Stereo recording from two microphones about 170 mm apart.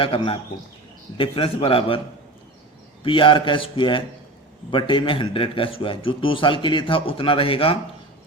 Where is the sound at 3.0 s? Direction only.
30° left (ahead or behind).